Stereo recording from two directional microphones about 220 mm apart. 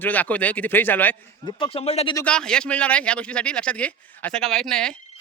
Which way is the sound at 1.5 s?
20° left (ahead or behind).